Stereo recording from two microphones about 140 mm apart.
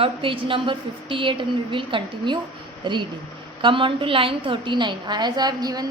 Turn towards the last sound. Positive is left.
turn(degrees=-30)  # may be behind; listen again after turning